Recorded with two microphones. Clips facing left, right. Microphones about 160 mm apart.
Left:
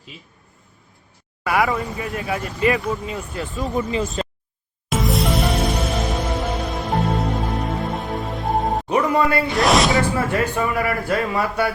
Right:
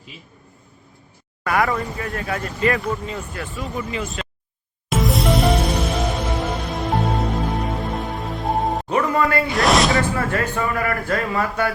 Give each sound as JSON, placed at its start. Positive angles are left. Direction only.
{"t": 1.5, "sound": "speech", "side_deg": 10}
{"t": 3.6, "sound": "speech", "side_deg": 30}
{"t": 4.9, "sound": "music", "side_deg": 0}
{"t": 8.9, "sound": "music", "side_deg": 15}
{"t": 9.6, "sound": "a sound", "side_deg": 0}
{"t": 10.2, "sound": "speech", "side_deg": 15}